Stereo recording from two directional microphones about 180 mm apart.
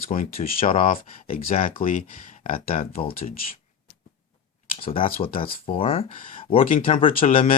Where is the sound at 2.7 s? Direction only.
35° left (ahead or behind).